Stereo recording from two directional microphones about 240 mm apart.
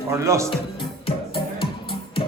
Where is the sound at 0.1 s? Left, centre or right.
Centre.